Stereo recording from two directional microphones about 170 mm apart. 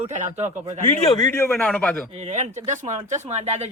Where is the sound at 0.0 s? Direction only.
45° right (ahead or behind).